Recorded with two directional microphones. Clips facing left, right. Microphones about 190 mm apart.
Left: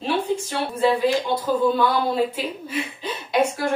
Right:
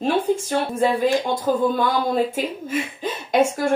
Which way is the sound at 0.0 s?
45° right (ahead or behind).